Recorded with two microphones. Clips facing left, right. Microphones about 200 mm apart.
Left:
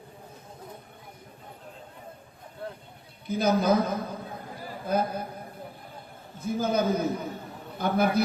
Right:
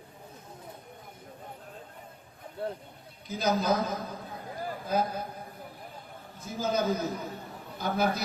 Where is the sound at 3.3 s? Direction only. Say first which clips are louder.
Left 4 dB; 55° left (ahead or behind).